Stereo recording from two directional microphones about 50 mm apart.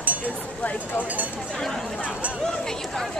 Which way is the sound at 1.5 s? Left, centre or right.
Centre.